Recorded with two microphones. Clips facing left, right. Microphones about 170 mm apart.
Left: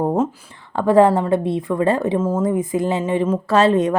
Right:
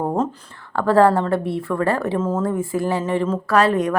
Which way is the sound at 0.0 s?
10° left (ahead or behind).